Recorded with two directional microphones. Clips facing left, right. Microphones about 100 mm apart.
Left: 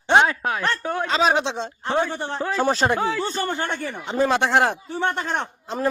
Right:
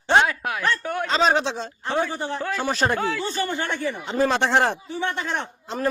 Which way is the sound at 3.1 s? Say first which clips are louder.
Left 1 dB; 35° left (ahead or behind).